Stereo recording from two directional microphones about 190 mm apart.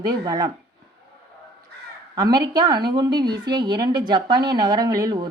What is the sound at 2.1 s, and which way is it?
A woman's voice, 20° right (ahead or behind).